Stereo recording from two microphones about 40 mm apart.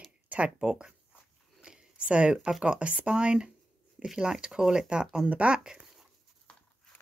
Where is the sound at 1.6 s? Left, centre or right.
Right.